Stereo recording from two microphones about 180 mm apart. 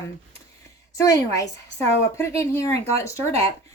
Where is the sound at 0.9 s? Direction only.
20° left (ahead or behind).